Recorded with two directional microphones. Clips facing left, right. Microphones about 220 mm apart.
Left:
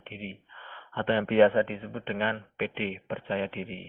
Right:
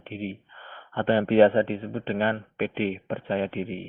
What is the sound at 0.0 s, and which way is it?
Speech, 35° right (ahead or behind).